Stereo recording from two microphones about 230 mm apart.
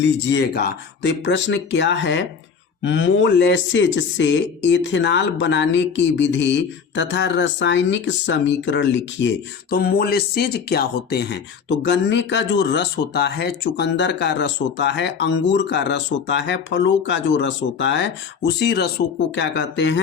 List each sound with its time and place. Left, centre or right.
0.0 s speech: left